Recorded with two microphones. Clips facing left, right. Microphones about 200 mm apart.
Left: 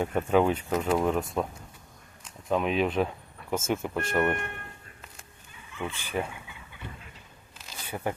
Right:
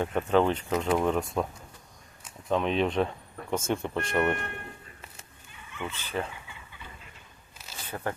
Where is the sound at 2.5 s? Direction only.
5° left (ahead or behind).